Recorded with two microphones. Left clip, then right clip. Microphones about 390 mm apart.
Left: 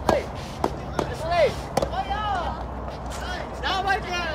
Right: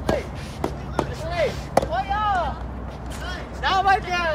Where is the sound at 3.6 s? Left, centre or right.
Centre.